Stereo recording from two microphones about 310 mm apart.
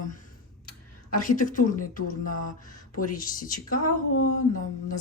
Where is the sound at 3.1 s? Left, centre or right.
Left.